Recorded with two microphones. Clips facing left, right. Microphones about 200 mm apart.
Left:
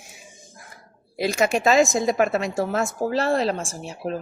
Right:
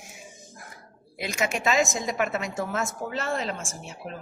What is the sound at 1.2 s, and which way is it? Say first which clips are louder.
A woman's voice: left 7 dB; 35° left (ahead or behind).